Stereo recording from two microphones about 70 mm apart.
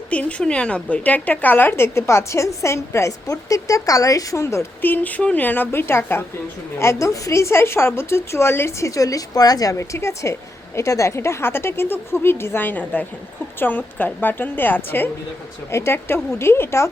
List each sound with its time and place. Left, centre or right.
0.1 s a woman's voice: centre; by 4.6 s left
4.8 s a woman's voice: left
8.9 s a woman's voice: left
9.7 s a woman's voice: left